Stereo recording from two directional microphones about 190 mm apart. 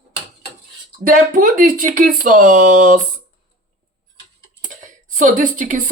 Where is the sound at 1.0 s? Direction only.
45° right (ahead or behind).